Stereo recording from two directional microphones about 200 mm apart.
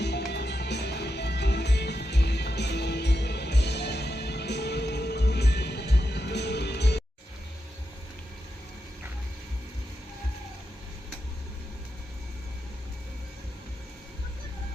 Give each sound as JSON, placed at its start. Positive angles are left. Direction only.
{"t": 0.3, "sound": "music", "side_deg": 55}